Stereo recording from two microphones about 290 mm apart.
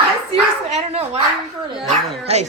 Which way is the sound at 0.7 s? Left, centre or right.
Right.